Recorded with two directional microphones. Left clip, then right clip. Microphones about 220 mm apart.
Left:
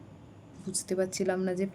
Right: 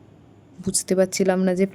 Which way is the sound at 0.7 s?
40° right (ahead or behind).